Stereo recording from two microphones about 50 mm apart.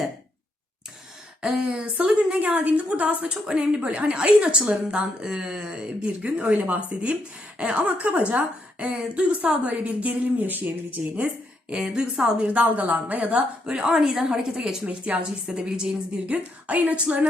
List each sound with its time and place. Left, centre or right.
1.4 s a woman's voice: centre; by 11.0 s right
11.7 s a woman's voice: centre
12.4 s a woman's voice: right
13.7 s a woman's voice: centre
14.8 s a woman's voice: right
16.6 s a woman's voice: right